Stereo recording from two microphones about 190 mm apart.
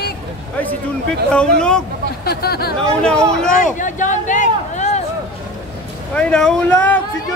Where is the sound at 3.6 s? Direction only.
40° left (ahead or behind).